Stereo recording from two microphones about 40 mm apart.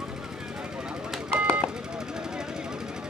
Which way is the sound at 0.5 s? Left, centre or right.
Centre.